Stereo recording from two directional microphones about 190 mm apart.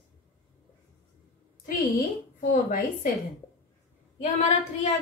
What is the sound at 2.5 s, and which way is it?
Speech, 45° left (ahead or behind).